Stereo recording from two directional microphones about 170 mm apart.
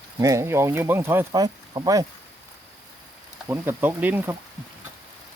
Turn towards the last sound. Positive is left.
turn(degrees=-10)  # may be behind; listen again after turning